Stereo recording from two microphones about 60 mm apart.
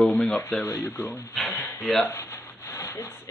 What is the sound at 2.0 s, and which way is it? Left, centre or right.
Rub, left.